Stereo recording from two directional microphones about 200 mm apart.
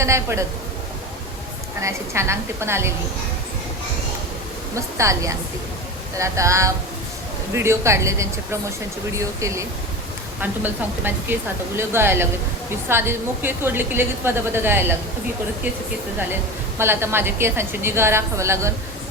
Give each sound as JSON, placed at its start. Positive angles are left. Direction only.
{"t": 0.0, "sound": "a woman's voice", "side_deg": -15}
{"t": 1.8, "sound": "a woman's voice", "side_deg": -15}
{"t": 4.7, "sound": "a woman's voice", "side_deg": -15}
{"t": 16.3, "sound": "a woman's voice", "side_deg": -10}